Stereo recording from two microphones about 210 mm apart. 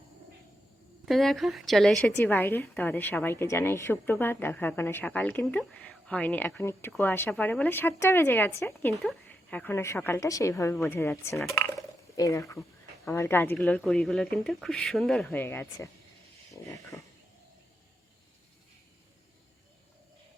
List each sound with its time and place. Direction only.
1.0 s a woman's voice: centre (ahead or behind)
11.3 s speech: centre (ahead or behind)
12.1 s speech: 15° left (ahead or behind)
16.5 s a sound: 15° left (ahead or behind)